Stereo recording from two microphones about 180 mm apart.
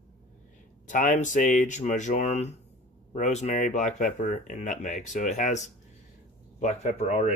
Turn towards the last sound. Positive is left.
turn(degrees=40)  # may be behind; listen again after turning